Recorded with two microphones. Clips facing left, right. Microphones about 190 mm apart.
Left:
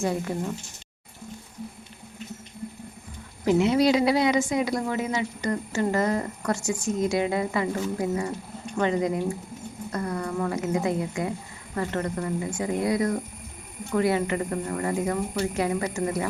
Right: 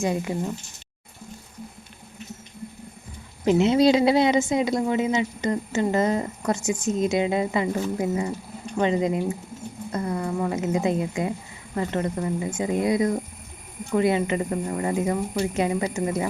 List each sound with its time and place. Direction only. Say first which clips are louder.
0.0 s speech: right 2 dB; 15° right (ahead or behind)
3.4 s a woman's voice: right 2 dB; 25° right (ahead or behind)